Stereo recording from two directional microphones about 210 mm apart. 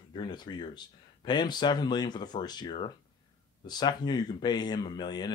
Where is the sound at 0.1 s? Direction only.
20° left (ahead or behind).